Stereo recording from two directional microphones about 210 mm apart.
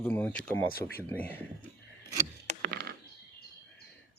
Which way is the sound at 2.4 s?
45° right (ahead or behind).